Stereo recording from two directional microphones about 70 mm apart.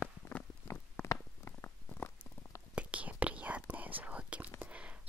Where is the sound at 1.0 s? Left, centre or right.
Left.